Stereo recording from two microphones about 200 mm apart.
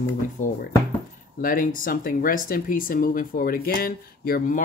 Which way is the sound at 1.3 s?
45° left (ahead or behind).